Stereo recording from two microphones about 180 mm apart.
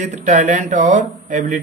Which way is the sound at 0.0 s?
45° right (ahead or behind).